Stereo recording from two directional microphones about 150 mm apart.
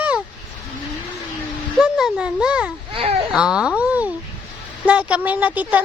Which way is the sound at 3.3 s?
5° right (ahead or behind).